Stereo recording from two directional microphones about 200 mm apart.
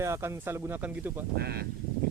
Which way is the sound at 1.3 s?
50° right (ahead or behind).